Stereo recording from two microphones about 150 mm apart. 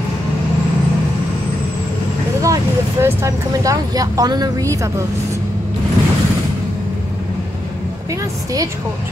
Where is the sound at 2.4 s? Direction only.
20° right (ahead or behind).